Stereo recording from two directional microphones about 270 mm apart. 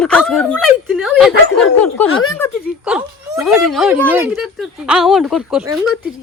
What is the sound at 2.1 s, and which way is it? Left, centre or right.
Speech, left.